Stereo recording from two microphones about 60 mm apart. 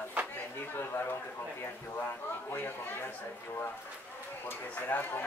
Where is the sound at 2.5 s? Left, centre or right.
Left.